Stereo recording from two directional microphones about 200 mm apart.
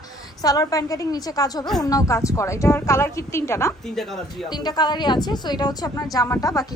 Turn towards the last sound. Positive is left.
turn(degrees=15)  # may be behind; listen again after turning